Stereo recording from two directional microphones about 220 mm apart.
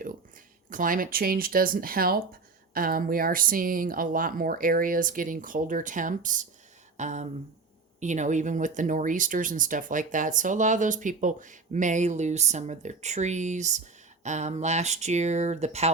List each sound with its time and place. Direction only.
0.7 s speech: 40° right (ahead or behind)